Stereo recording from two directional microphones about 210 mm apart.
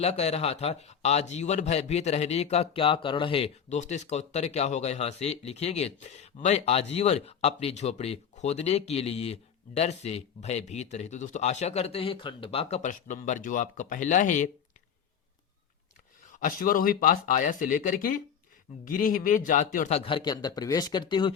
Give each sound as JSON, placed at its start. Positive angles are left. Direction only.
{"t": 0.0, "sound": "a man's voice", "side_deg": 30}
{"t": 16.2, "sound": "a man's voice", "side_deg": 40}